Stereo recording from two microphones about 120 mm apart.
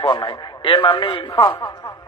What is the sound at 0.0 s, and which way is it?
A woman's voice, 35° left (ahead or behind).